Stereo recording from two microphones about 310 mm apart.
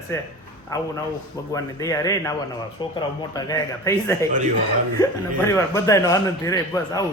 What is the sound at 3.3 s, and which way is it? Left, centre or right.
A man's voice, centre.